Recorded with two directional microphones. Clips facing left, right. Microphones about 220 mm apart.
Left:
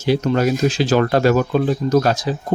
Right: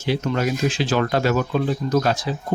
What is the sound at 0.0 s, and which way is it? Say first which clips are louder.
Speech: left 5 dB; 40° left (ahead or behind).